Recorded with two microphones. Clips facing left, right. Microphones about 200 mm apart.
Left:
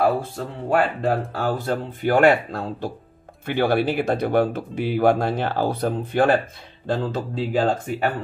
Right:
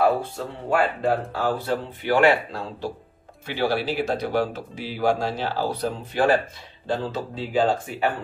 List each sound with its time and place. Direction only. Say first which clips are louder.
0.7 s speech: left 1 dB; 45° left (ahead or behind)